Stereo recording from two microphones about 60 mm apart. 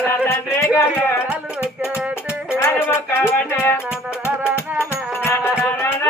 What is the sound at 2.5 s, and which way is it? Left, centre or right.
Music, left.